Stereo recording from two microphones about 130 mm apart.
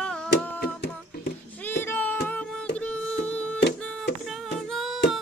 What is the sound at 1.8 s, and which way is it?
Child singing, 15° left (ahead or behind).